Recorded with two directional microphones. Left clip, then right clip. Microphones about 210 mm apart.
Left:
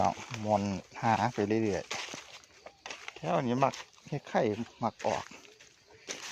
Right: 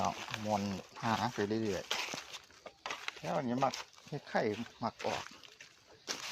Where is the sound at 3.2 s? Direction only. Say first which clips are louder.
Left 5 dB; 45° left (ahead or behind).